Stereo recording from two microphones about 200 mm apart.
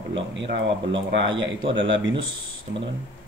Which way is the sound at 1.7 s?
65° right (ahead or behind).